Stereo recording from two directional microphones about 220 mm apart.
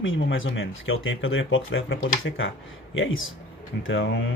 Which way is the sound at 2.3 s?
50° left (ahead or behind).